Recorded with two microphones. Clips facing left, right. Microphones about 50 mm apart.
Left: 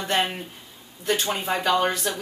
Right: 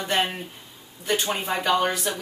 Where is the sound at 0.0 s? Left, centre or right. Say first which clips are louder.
Even; centre.